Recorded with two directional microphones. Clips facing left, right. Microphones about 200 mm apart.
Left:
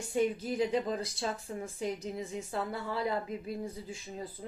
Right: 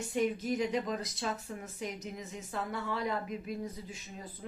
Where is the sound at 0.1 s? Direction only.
30° left (ahead or behind).